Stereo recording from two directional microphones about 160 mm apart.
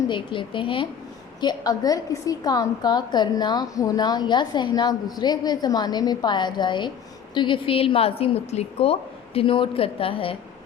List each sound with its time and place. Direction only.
0.1 s a woman's voice: 30° left (ahead or behind)